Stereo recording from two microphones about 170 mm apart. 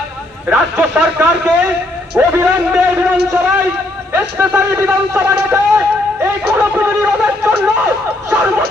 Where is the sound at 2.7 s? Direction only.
10° right (ahead or behind).